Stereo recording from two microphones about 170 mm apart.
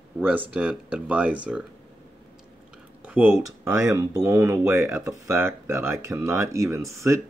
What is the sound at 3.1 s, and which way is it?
Speech, 10° right (ahead or behind).